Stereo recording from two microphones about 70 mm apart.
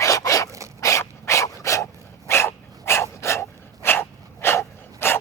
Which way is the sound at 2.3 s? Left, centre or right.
Left.